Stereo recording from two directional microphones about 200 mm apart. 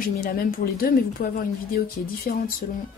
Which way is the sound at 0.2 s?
45° left (ahead or behind).